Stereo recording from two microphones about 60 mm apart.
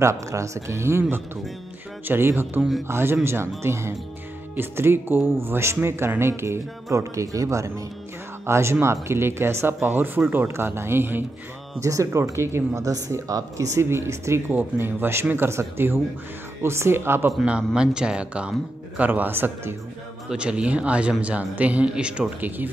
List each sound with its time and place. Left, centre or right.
0.0 s speech: right
2.0 s speech: right
4.6 s speech: right
6.9 s speech: right
8.5 s speech: right
11.8 s speech: right
13.3 s speech: right
13.7 s speech: right
17.7 s speech: centre
18.9 s speech: right
20.2 s speech: centre